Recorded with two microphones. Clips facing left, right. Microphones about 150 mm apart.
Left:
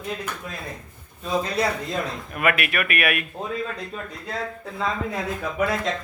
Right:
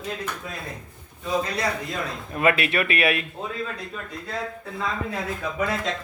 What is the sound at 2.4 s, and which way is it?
Speech, 25° right (ahead or behind).